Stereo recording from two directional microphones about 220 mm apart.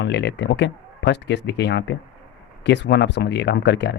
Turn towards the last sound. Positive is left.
turn(degrees=50)  # may be behind; listen again after turning